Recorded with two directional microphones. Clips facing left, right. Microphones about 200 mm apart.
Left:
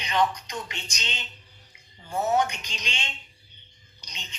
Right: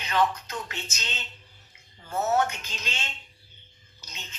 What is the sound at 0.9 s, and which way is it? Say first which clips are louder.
Speech: left 1 dB; 5° right (ahead or behind).